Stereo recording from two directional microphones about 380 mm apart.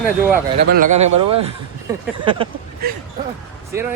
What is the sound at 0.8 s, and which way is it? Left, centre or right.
Speech, right.